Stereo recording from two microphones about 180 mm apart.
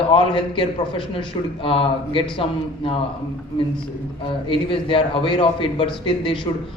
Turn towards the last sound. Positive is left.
turn(degrees=30)  # may be behind; listen again after turning